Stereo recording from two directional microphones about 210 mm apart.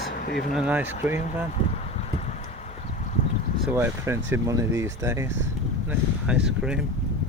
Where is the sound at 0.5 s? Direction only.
5° right (ahead or behind).